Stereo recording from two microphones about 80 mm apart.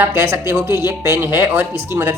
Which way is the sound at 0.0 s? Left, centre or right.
Right.